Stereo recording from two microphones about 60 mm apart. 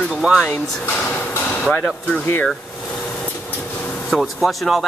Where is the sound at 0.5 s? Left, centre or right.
Left.